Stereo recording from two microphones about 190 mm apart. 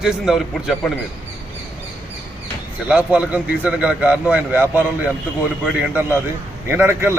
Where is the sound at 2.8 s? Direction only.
5° right (ahead or behind).